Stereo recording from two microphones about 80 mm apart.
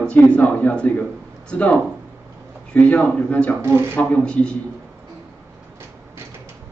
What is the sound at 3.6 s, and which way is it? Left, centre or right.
Speech, right.